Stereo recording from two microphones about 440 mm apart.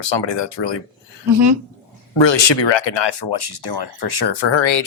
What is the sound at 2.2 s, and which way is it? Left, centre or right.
Speech, left.